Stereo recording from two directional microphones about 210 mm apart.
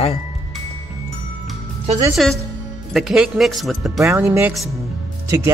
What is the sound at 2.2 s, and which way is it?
Speech, centre (ahead or behind).